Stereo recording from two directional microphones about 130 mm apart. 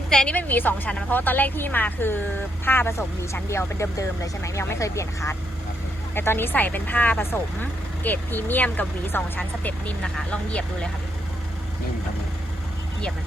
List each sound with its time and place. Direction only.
0.1 s speech: 5° left (ahead or behind)